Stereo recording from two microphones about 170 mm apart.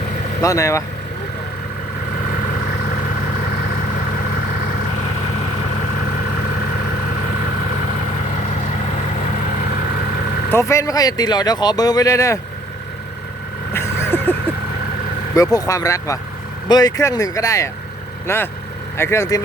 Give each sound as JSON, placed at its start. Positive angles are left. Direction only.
{"t": 0.4, "sound": "speech", "side_deg": 20}
{"t": 10.5, "sound": "speech", "side_deg": 15}
{"t": 13.7, "sound": "vehicle", "side_deg": 15}
{"t": 15.5, "sound": "speech", "side_deg": 20}